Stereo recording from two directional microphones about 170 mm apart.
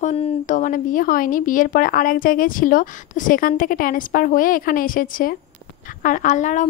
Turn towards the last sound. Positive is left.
turn(degrees=45)  # may be behind; listen again after turning